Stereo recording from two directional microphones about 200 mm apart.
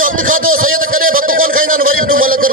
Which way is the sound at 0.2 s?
45° right (ahead or behind).